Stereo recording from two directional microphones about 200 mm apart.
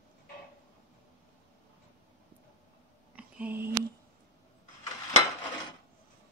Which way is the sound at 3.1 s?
5° right (ahead or behind).